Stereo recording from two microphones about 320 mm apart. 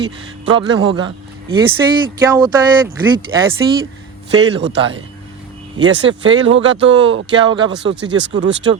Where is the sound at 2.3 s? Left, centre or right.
Centre.